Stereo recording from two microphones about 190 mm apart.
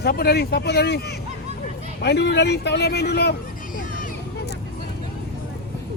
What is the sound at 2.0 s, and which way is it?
Speech, 60° left (ahead or behind).